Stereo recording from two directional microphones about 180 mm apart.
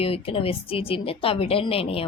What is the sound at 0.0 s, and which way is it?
A woman's voice, 30° left (ahead or behind).